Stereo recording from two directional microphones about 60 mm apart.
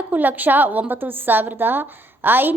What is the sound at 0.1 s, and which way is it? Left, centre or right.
A woman's voice, right.